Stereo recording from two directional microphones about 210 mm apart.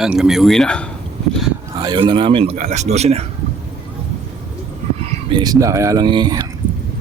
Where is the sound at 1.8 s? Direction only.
20° right (ahead or behind).